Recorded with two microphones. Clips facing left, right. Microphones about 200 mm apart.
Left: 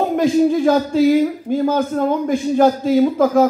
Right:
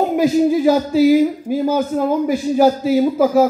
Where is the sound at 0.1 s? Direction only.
5° right (ahead or behind).